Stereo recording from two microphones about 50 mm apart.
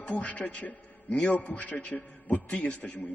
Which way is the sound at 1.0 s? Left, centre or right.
Centre.